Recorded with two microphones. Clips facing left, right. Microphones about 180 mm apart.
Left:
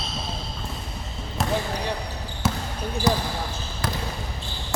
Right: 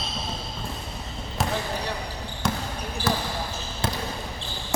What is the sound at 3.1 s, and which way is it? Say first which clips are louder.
Basketball bounce: left 3 dB; 15° left (ahead or behind).